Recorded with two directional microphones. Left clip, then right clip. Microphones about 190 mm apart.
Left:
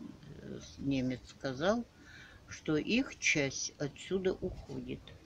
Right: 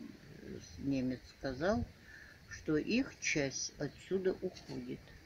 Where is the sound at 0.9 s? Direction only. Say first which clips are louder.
Left 2 dB; 20° left (ahead or behind).